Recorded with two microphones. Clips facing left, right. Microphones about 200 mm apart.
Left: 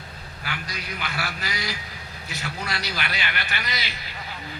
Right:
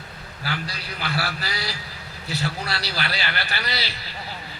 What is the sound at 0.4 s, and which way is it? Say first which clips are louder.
A man's voice: right 3 dB; 35° right (ahead or behind).